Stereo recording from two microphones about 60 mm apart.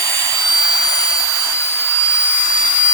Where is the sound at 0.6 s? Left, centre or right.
Left.